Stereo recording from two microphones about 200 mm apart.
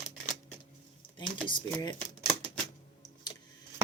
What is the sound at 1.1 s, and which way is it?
Speech, 25° left (ahead or behind).